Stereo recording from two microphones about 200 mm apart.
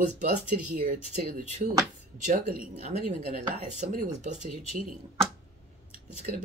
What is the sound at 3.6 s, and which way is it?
Speech, 35° right (ahead or behind).